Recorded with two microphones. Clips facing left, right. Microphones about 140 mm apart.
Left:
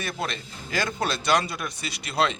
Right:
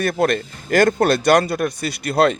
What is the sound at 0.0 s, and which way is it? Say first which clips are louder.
A man's voice: right 13 dB; 55° right (ahead or behind).